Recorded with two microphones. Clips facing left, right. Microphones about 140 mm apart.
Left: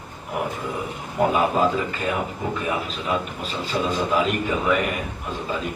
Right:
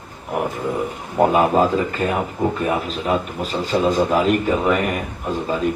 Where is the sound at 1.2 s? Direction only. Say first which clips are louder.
Right 5 dB; 45° right (ahead or behind).